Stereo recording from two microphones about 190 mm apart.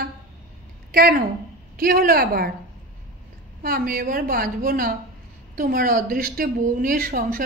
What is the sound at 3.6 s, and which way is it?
A woman's voice, 50° right (ahead or behind).